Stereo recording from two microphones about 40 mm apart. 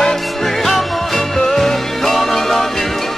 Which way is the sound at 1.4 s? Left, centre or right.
Centre.